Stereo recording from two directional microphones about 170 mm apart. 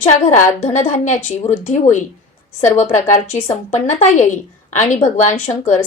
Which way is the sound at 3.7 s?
40° left (ahead or behind).